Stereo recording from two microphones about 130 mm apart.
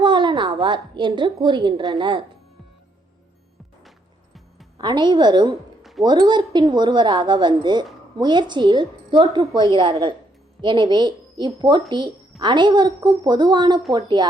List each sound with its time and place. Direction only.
0.0 s a woman's voice: 35° right (ahead or behind)
4.8 s a woman's voice: 35° right (ahead or behind)
5.8 s a sound: centre (ahead or behind)
6.1 s a woman's voice: 35° right (ahead or behind)